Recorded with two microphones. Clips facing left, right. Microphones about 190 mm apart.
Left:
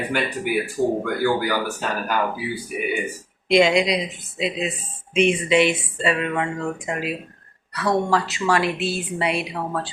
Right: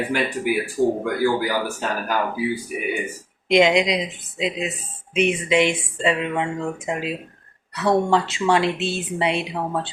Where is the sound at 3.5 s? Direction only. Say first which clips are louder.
Even; 20° right (ahead or behind).